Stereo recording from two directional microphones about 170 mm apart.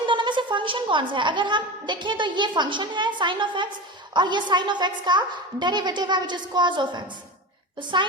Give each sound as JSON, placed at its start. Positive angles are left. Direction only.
{"t": 0.1, "sound": "a woman's voice", "side_deg": -30}